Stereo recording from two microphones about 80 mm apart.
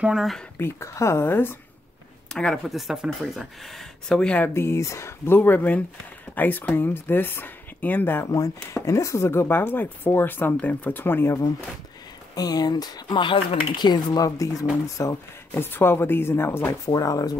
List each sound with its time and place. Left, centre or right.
0.0 s speech: centre
0.6 s speech: left
1.2 s speech: left
2.3 s speech: centre
2.7 s speech: centre
4.6 s speech: left
8.3 s speech: left
12.4 s speech: left
15.5 s speech: left
16.8 s speech: left